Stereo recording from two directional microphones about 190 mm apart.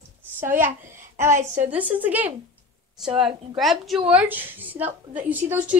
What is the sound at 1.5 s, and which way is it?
Speech, 40° right (ahead or behind).